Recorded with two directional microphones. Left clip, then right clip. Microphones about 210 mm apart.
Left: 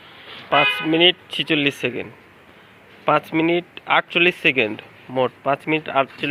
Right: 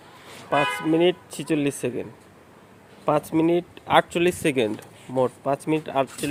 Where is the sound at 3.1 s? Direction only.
10° right (ahead or behind).